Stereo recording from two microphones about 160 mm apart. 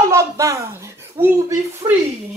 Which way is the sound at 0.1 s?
20° right (ahead or behind).